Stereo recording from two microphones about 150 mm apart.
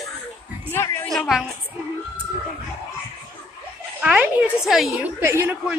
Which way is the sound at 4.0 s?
5° right (ahead or behind).